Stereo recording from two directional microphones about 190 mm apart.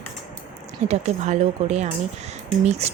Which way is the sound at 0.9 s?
35° right (ahead or behind).